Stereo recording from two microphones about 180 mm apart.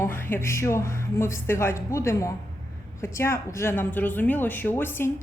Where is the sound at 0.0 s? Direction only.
10° left (ahead or behind).